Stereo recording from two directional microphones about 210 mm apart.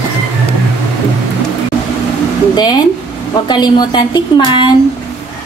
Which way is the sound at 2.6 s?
20° left (ahead or behind).